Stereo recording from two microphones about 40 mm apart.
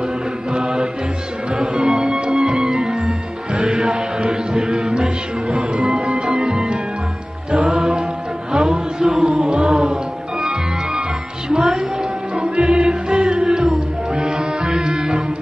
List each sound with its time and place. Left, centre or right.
0.5 s mantra: centre
1.5 s music: right